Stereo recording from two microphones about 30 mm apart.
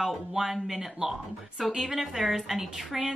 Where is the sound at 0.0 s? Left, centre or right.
Centre.